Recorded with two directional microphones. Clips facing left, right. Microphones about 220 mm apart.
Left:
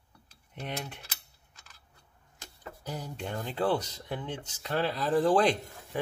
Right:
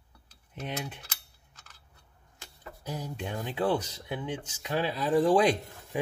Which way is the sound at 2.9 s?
10° right (ahead or behind).